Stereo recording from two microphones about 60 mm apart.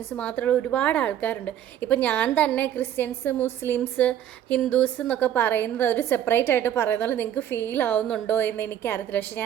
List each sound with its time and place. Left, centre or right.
0.2 s a woman's voice: left
3.9 s a woman's voice: left